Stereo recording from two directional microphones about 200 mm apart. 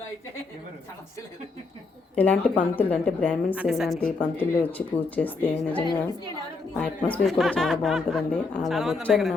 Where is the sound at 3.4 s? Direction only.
5° right (ahead or behind); by 5.5 s 10° left (ahead or behind).